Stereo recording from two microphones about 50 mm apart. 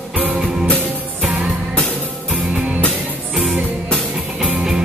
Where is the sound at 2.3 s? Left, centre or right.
Right.